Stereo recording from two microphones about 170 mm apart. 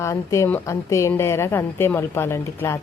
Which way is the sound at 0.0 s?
15° left (ahead or behind).